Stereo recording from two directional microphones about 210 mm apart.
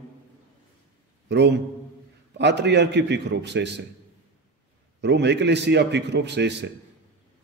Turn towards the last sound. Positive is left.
turn(degrees=-55)  # may be behind; listen again after turning